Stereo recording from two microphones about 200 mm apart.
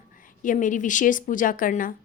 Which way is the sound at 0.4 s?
40° left (ahead or behind).